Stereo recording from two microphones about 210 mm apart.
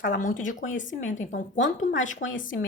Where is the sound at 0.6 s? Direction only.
60° left (ahead or behind).